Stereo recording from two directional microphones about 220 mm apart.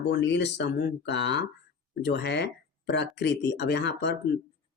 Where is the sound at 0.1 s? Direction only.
55° left (ahead or behind).